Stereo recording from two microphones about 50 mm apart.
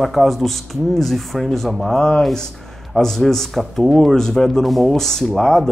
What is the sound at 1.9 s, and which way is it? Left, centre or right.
Speech, centre.